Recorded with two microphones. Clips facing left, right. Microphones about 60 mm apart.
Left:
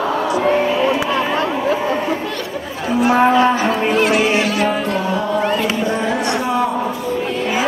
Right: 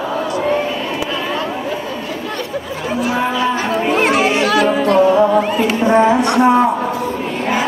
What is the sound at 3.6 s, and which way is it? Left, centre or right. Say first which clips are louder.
Cattle: even; right.